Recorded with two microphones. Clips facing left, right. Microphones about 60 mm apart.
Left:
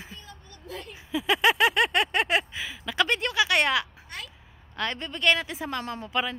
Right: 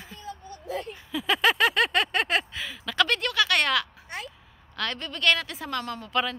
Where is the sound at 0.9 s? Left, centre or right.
Centre.